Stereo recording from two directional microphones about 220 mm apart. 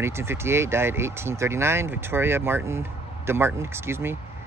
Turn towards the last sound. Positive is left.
turn(degrees=-10)  # may be behind; listen again after turning